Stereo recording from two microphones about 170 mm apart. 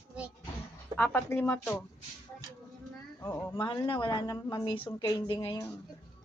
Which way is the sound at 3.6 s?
25° left (ahead or behind).